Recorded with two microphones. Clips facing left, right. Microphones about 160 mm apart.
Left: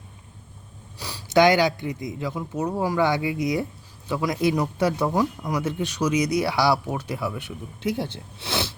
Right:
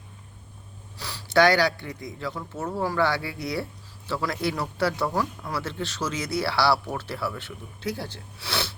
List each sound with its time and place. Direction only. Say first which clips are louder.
0.9 s speech: left 2 dB; 20° left (ahead or behind)